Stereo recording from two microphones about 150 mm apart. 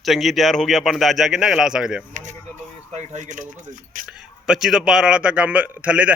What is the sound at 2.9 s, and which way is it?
Speech, 50° right (ahead or behind).